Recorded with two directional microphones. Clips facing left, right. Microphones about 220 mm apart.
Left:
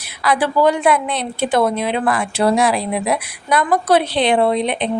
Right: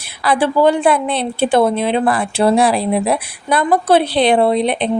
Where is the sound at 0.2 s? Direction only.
30° right (ahead or behind).